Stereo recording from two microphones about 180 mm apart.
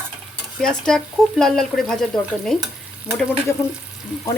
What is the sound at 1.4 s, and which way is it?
Speech, centre (ahead or behind).